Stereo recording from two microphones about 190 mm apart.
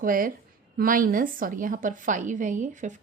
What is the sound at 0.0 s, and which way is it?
A woman's voice, 45° right (ahead or behind).